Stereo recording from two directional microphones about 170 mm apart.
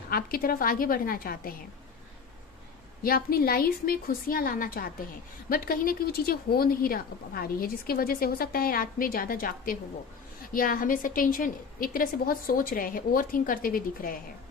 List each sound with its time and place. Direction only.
0.1 s a woman's voice: 60° left (ahead or behind)
3.0 s a woman's voice: 60° left (ahead or behind)